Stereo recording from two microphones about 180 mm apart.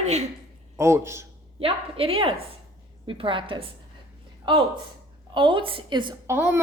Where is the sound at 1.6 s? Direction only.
30° right (ahead or behind).